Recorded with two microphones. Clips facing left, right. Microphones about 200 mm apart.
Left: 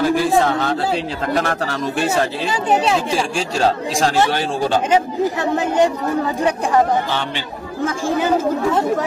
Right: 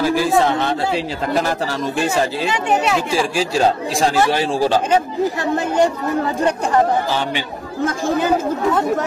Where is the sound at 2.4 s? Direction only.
30° left (ahead or behind).